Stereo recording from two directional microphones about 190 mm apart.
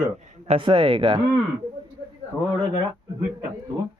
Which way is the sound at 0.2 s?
35° right (ahead or behind).